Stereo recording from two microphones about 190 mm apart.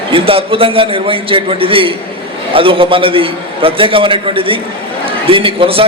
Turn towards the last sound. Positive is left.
turn(degrees=-30)  # may be behind; listen again after turning